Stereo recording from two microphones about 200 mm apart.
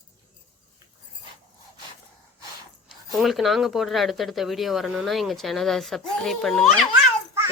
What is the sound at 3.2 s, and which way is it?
Speech, centre (ahead or behind).